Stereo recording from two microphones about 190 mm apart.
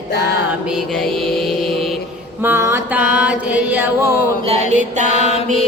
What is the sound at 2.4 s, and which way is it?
Music, 10° right (ahead or behind).